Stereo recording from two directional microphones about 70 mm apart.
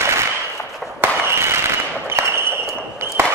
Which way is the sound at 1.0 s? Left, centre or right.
Right.